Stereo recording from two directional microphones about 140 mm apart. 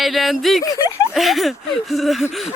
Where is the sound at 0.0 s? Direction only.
Centre (ahead or behind).